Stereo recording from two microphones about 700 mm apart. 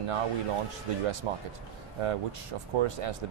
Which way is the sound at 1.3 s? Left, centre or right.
Right.